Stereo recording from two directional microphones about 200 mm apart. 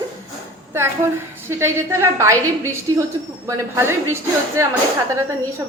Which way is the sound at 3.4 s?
15° right (ahead or behind).